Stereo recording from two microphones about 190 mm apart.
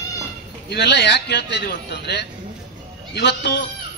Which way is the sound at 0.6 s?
60° left (ahead or behind).